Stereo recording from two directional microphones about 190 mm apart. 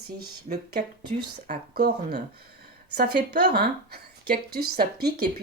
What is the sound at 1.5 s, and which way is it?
Speech, 50° right (ahead or behind).